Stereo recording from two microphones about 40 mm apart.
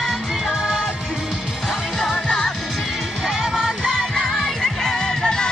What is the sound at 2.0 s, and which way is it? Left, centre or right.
Music, centre.